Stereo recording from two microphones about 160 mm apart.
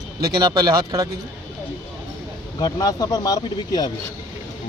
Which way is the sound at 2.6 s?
25° left (ahead or behind).